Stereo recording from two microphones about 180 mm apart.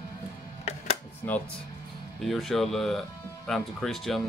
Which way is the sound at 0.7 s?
35° left (ahead or behind).